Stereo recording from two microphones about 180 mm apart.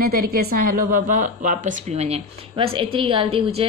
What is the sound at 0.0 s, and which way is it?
A woman's voice, 55° right (ahead or behind).